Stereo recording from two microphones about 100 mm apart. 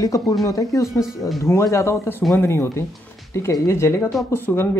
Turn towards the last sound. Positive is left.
turn(degrees=25)  # may be behind; listen again after turning